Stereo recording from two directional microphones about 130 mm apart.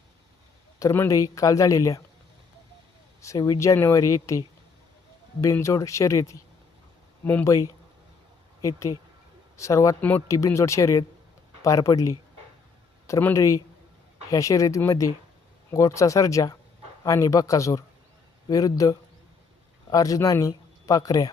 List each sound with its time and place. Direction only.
0.8 s speech: 25° left (ahead or behind)
3.2 s speech: 25° left (ahead or behind)